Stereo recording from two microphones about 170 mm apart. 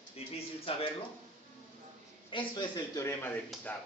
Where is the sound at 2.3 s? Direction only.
25° left (ahead or behind).